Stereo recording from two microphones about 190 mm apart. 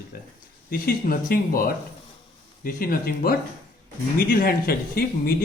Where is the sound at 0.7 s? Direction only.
50° left (ahead or behind).